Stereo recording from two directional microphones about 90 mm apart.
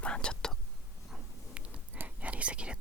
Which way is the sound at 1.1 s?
15° right (ahead or behind).